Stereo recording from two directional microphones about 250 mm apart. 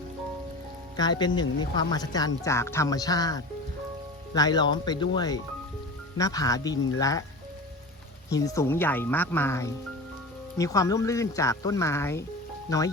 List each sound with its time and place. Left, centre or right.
0.9 s speech: centre
8.3 s speech: centre